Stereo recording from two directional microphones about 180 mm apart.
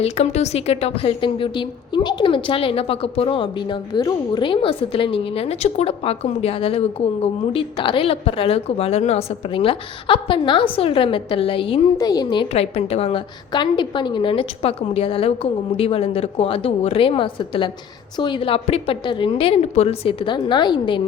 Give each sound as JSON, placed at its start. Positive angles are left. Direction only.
{"t": 0.0, "sound": "a woman's voice", "side_deg": 35}